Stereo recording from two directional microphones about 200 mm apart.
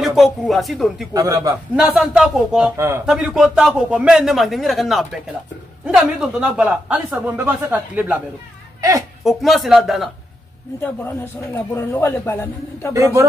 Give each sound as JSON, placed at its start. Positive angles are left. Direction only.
{"t": 0.0, "sound": "a man's voice", "side_deg": 0}
{"t": 1.1, "sound": "speech", "side_deg": -15}
{"t": 1.8, "sound": "a man's voice", "side_deg": 0}
{"t": 9.2, "sound": "a man's voice", "side_deg": 0}
{"t": 11.5, "sound": "a man's voice", "side_deg": 10}
{"t": 12.9, "sound": "speech", "side_deg": -15}